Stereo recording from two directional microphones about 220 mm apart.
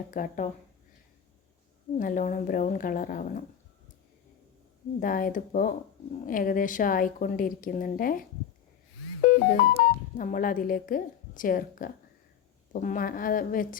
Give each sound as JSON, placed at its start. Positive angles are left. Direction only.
{"t": 0.1, "sound": "a woman's voice", "side_deg": 35}
{"t": 2.0, "sound": "a woman's voice", "side_deg": 35}
{"t": 4.9, "sound": "a woman's voice", "side_deg": 40}
{"t": 9.2, "sound": "music", "side_deg": 40}
{"t": 10.2, "sound": "a woman's voice", "side_deg": 40}